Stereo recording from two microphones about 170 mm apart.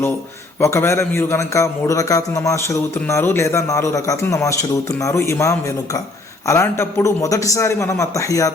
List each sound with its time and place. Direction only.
0.6 s a man's voice: 15° left (ahead or behind)